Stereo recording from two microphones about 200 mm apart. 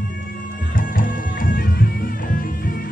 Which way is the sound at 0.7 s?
45° left (ahead or behind).